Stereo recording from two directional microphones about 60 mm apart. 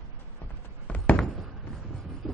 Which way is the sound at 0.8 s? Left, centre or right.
Left.